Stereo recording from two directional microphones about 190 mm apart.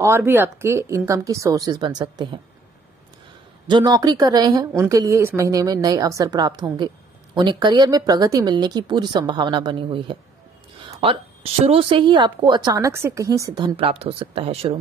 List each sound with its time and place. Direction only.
0.0 s speech: 10° right (ahead or behind)
3.6 s a woman's voice: 20° right (ahead or behind)
13.7 s speech: 30° right (ahead or behind)